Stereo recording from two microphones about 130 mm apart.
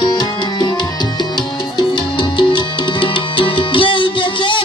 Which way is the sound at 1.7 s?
40° left (ahead or behind).